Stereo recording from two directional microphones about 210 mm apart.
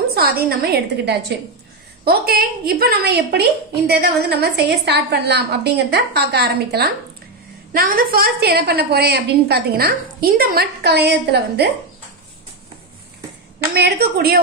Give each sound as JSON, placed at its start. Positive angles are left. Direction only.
{"t": 0.1, "sound": "a woman's voice", "side_deg": -45}
{"t": 13.7, "sound": "a woman's voice", "side_deg": -50}